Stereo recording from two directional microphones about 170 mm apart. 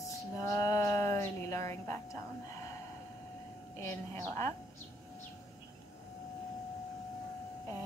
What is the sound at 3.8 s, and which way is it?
Speech, 15° left (ahead or behind).